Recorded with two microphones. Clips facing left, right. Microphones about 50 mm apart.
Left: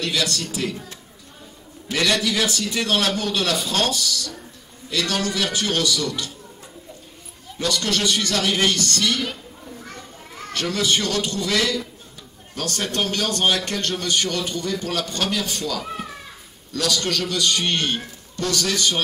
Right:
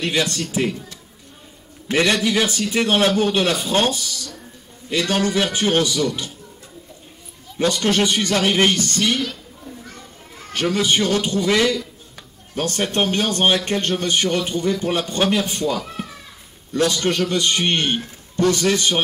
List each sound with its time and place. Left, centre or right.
0.0 s a man's voice: right
1.9 s a man's voice: right
7.5 s a man's voice: right
10.5 s a man's voice: right